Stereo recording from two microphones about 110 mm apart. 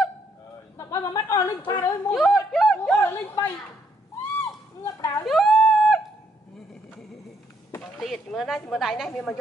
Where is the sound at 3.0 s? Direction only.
30° left (ahead or behind).